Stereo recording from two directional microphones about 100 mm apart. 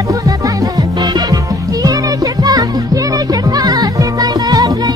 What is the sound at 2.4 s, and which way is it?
Music, 40° right (ahead or behind).